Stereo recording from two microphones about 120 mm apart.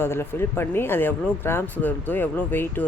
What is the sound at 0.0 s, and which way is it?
Speech, 20° left (ahead or behind).